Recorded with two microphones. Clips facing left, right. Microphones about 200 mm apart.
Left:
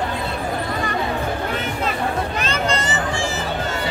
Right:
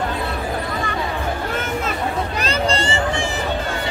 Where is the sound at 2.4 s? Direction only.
35° right (ahead or behind).